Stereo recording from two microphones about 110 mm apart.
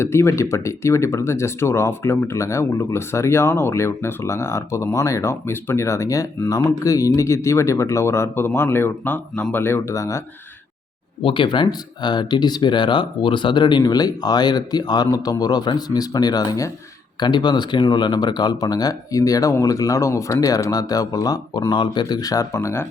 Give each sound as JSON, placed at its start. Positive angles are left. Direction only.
{"t": 0.0, "sound": "speech", "side_deg": 25}
{"t": 11.2, "sound": "speech", "side_deg": 50}